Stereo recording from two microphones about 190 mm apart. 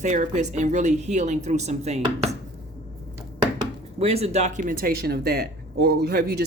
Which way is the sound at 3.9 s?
35° right (ahead or behind).